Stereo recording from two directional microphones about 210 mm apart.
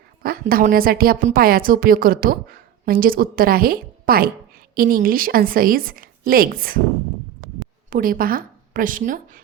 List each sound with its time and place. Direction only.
0.2 s a woman's voice: 45° right (ahead or behind)
7.9 s a woman's voice: 40° right (ahead or behind)